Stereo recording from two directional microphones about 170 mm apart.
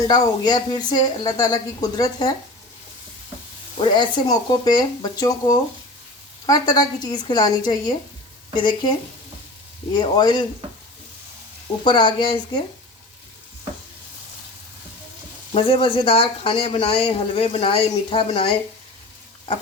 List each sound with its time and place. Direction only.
0.1 s speech: 25° left (ahead or behind)
3.8 s speech: 25° left (ahead or behind)
9.9 s speech: 25° left (ahead or behind)
11.8 s speech: 30° left (ahead or behind)
15.5 s speech: 30° left (ahead or behind)